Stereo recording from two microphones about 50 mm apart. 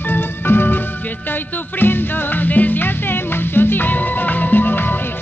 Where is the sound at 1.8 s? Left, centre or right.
Left.